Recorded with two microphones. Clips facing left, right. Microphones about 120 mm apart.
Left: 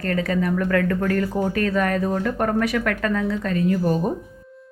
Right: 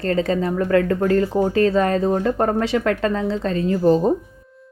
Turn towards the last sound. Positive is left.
turn(degrees=-25)  # may be behind; listen again after turning